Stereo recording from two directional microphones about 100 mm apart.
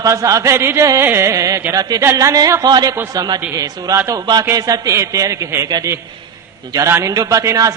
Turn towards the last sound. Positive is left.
turn(degrees=-35)  # may be behind; listen again after turning